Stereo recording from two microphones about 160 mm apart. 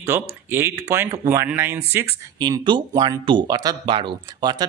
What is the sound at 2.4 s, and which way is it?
Speech, 30° right (ahead or behind).